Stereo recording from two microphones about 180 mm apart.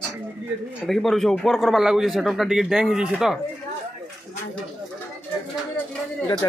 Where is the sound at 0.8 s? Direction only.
Centre (ahead or behind).